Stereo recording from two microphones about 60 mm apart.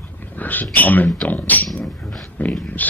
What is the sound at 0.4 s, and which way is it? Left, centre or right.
Speech, left.